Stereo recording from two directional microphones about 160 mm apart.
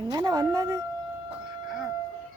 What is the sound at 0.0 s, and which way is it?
Speech, 25° right (ahead or behind).